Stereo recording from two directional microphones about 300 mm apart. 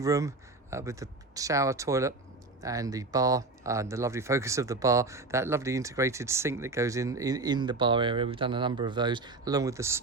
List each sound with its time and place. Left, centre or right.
0.0 s speech: centre